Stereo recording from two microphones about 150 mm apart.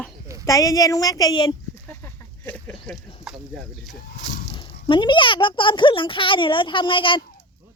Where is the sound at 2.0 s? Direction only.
10° left (ahead or behind).